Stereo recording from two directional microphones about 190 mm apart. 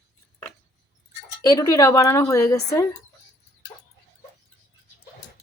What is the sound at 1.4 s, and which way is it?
Speech, 20° left (ahead or behind).